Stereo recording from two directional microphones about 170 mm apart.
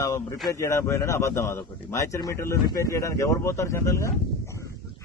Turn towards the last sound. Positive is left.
turn(degrees=15)  # may be behind; listen again after turning